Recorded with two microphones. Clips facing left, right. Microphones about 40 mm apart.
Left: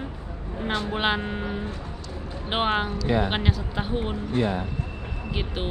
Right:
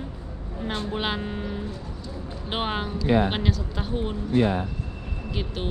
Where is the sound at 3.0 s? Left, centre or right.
Centre.